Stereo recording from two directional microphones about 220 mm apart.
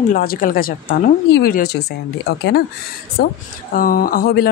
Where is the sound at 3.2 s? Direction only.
45° left (ahead or behind).